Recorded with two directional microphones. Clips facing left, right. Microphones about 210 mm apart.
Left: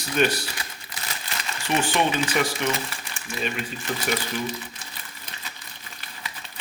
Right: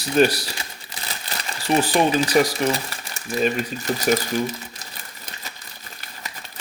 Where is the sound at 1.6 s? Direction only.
35° right (ahead or behind).